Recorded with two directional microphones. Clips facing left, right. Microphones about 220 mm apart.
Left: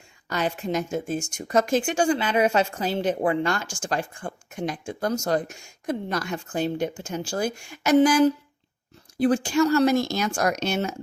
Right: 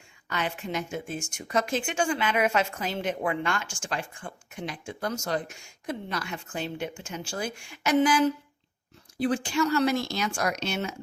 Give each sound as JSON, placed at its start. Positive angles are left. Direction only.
{"t": 0.3, "sound": "speech", "side_deg": 40}